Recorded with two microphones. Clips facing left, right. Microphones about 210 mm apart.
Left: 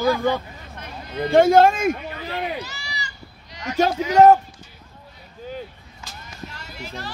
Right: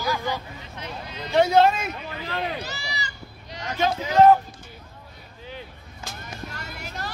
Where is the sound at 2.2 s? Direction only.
15° left (ahead or behind).